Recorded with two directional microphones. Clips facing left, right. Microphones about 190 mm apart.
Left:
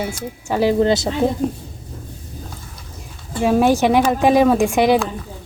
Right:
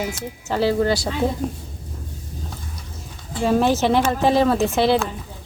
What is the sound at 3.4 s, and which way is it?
Speech, 10° left (ahead or behind).